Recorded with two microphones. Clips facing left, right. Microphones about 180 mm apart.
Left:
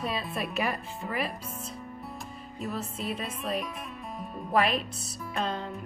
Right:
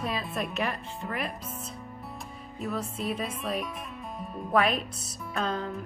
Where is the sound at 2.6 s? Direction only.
Centre (ahead or behind).